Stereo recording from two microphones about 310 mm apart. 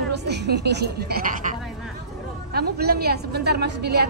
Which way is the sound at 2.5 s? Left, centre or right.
Right.